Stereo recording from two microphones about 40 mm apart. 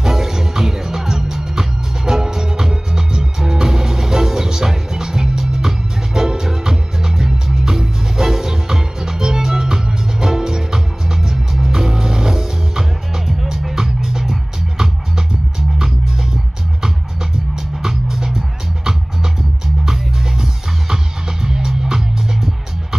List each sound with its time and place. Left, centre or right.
0.0 s music: centre
16.8 s music: centre
19.8 s music: centre